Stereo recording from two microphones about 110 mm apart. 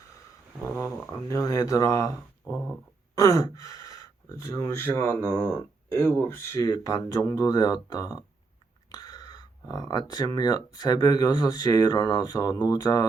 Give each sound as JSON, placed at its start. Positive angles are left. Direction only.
{"t": 1.3, "sound": "speech", "side_deg": 30}
{"t": 3.2, "sound": "speech", "side_deg": 30}
{"t": 8.9, "sound": "a sound", "side_deg": 35}
{"t": 10.1, "sound": "speech", "side_deg": 35}